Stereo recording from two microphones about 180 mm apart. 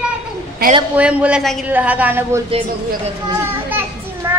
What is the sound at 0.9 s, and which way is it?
A woman's voice, 5° right (ahead or behind).